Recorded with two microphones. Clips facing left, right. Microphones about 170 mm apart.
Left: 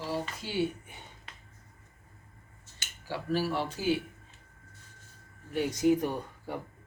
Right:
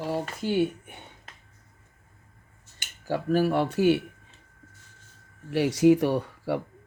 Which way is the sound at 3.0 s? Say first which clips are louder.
Right 7 dB; 50° right (ahead or behind).